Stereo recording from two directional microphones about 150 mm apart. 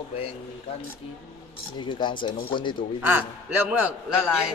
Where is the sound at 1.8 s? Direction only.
30° left (ahead or behind).